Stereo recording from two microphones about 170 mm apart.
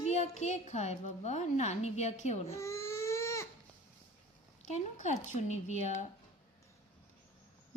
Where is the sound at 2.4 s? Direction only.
15° left (ahead or behind).